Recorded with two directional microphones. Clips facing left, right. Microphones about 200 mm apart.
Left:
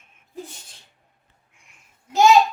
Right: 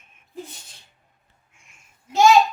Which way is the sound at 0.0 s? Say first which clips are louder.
Even; 20° right (ahead or behind).